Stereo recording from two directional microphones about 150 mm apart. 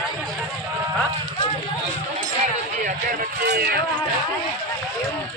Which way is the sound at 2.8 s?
70° right (ahead or behind).